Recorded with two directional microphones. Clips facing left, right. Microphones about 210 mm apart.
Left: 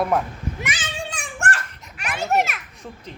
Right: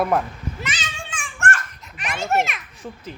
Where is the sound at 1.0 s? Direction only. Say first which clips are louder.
Left 2 dB; 35° left (ahead or behind).